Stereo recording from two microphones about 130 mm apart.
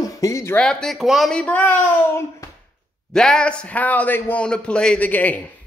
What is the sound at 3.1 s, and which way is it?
A man's voice, 5° left (ahead or behind).